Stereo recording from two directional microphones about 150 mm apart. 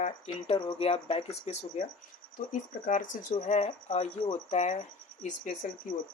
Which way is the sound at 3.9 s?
45° left (ahead or behind).